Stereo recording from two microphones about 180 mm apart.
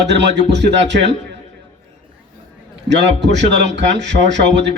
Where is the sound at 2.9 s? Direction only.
75° right (ahead or behind).